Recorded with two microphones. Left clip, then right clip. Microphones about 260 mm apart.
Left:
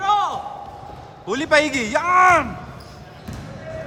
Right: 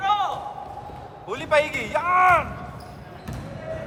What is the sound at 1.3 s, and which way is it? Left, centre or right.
A man's voice, left.